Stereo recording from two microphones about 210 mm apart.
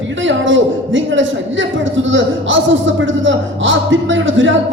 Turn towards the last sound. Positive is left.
turn(degrees=-65)  # may be behind; listen again after turning